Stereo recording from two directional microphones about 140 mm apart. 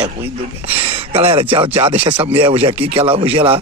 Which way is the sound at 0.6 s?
45° right (ahead or behind).